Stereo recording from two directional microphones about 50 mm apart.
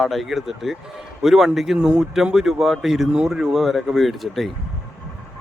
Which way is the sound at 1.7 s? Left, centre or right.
Centre.